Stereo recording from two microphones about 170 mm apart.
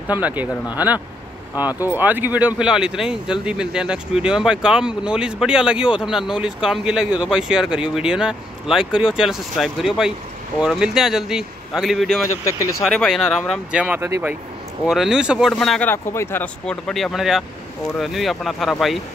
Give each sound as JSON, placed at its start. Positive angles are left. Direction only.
{"t": 0.1, "sound": "speech", "side_deg": -10}
{"t": 1.8, "sound": "speech", "side_deg": -10}
{"t": 12.4, "sound": "speech", "side_deg": 20}
{"t": 12.8, "sound": "speech", "side_deg": 0}
{"t": 14.9, "sound": "speech", "side_deg": -5}
{"t": 15.9, "sound": "speech", "side_deg": 15}